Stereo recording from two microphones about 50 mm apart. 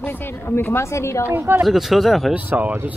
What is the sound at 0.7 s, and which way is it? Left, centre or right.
Speech, left.